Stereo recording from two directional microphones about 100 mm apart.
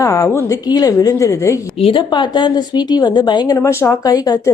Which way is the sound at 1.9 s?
50° left (ahead or behind).